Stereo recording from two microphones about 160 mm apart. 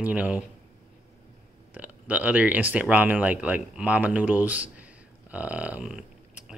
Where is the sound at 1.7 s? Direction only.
10° right (ahead or behind).